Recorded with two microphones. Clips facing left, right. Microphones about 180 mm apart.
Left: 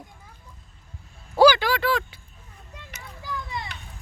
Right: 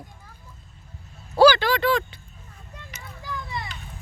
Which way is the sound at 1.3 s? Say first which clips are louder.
Right 1 dB; 15° left (ahead or behind).